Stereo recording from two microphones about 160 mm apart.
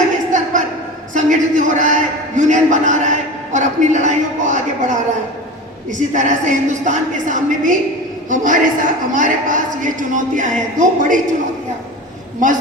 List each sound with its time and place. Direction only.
0.3 s a sound: 50° right (ahead or behind)
5.9 s a man's voice: 50° right (ahead or behind)
12.4 s a woman's voice: 55° right (ahead or behind)